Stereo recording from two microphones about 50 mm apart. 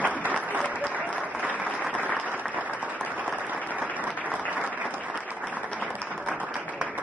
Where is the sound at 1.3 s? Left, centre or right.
Right.